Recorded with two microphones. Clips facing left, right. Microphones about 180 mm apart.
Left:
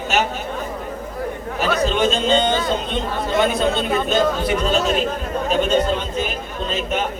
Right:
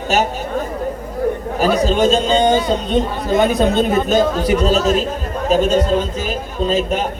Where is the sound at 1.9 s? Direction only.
40° right (ahead or behind).